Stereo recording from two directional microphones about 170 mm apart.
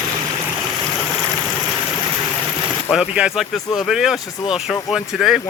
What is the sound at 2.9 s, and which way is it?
Speech, 5° right (ahead or behind).